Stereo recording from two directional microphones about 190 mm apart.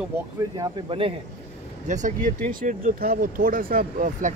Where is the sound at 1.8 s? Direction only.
40° right (ahead or behind).